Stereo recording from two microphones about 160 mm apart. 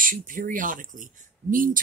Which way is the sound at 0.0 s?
60° right (ahead or behind).